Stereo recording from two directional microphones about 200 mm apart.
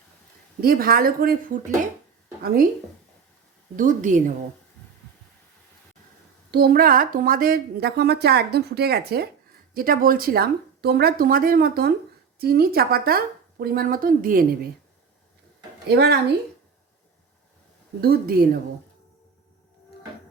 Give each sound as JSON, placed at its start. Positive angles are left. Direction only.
{"t": 0.6, "sound": "a woman's voice", "side_deg": -45}
{"t": 3.8, "sound": "a woman's voice", "side_deg": -40}
{"t": 6.5, "sound": "a woman's voice", "side_deg": -50}
{"t": 15.9, "sound": "a woman's voice", "side_deg": -55}
{"t": 18.0, "sound": "a woman's voice", "side_deg": -50}